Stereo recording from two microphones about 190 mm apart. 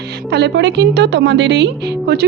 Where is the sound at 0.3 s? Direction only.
60° right (ahead or behind).